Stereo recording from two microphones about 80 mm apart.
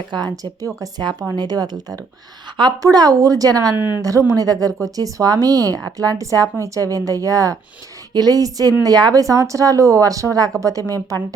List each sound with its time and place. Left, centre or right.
0.6 s speech: right
1.4 s speech: right
2.8 s speech: right
3.8 s speech: left
4.0 s speech: right